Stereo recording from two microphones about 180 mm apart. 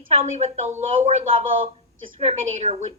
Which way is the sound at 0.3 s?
40° right (ahead or behind).